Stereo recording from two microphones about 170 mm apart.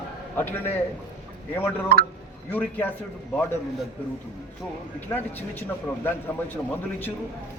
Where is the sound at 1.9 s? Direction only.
65° right (ahead or behind).